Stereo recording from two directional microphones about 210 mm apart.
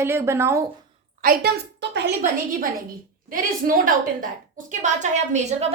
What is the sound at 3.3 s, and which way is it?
A woman's voice, 40° right (ahead or behind).